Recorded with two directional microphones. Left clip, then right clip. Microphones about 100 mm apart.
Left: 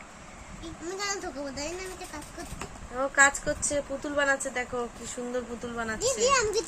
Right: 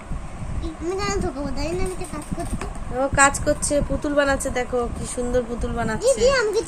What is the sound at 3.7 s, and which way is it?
Speech, 30° right (ahead or behind).